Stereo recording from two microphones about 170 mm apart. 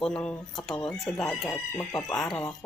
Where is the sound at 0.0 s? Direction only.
5° left (ahead or behind).